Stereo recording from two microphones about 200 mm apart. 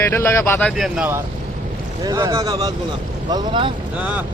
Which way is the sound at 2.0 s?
20° right (ahead or behind).